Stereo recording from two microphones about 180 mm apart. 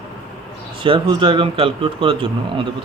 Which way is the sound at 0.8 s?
30° right (ahead or behind).